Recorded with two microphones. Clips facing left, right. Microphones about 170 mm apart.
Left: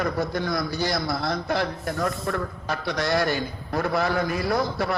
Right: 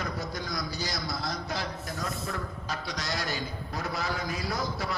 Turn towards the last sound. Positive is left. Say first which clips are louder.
# left 8 dB
turn(degrees=60)  # may be behind; listen again after turning